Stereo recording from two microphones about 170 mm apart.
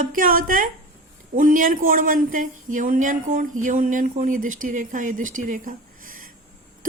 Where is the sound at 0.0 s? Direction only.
55° right (ahead or behind).